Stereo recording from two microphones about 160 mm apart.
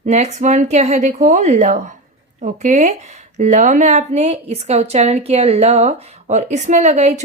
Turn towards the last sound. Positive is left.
turn(degrees=-45)  # may be behind; listen again after turning